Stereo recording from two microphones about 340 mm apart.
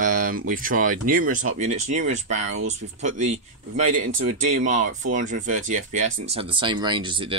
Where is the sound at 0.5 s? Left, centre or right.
Right.